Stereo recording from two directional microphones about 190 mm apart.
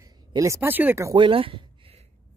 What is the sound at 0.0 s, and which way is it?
Speech, 20° right (ahead or behind).